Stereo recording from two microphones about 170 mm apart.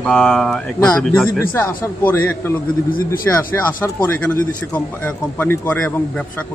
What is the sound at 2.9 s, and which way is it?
Speech, 55° left (ahead or behind).